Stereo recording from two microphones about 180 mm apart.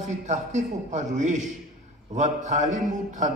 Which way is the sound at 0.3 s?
40° right (ahead or behind).